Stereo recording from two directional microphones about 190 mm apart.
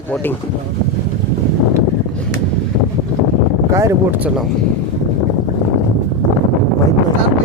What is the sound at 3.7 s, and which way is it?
Speech, 15° right (ahead or behind).